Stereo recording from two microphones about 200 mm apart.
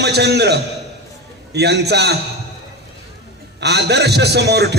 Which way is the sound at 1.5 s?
55° right (ahead or behind).